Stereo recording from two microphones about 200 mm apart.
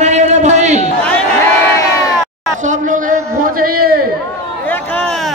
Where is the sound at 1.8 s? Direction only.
15° left (ahead or behind).